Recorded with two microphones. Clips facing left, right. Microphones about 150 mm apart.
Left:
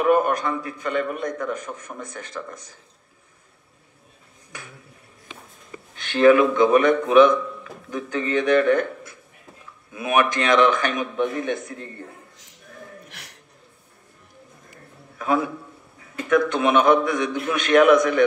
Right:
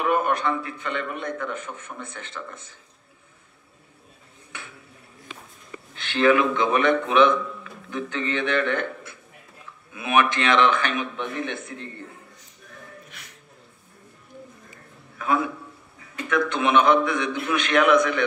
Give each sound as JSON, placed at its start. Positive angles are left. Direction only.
{"t": 0.0, "sound": "a man's voice", "side_deg": 40}
{"t": 5.3, "sound": "a sound", "side_deg": 20}
{"t": 5.9, "sound": "a man's voice", "side_deg": 45}
{"t": 15.1, "sound": "a man's voice", "side_deg": 40}